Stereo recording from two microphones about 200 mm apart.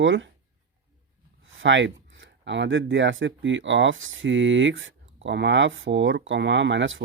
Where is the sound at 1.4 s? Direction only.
70° right (ahead or behind).